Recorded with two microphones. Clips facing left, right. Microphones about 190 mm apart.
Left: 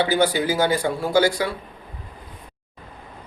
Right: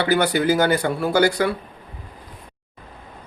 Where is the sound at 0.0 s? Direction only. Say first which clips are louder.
Right 1 dB; 65° right (ahead or behind).